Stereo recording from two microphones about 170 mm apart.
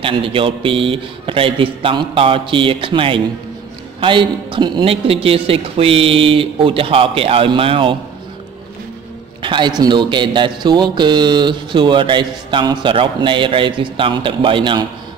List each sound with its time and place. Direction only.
0.0 s a woman's voice: 30° right (ahead or behind)
9.4 s speech: 30° right (ahead or behind)